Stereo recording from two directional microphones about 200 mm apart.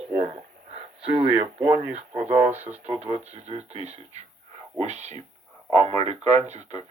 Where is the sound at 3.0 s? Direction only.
35° right (ahead or behind).